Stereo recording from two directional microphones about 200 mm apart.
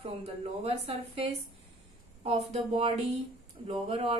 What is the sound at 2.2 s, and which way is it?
A woman's voice, 30° right (ahead or behind).